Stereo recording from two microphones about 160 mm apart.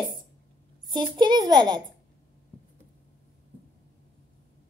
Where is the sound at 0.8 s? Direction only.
25° right (ahead or behind).